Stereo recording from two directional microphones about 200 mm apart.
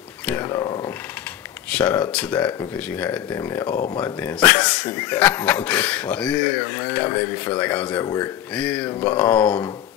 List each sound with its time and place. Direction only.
0.3 s speech: 5° left (ahead or behind)
0.6 s speech: 20° left (ahead or behind)
1.7 s speech: 5° left (ahead or behind)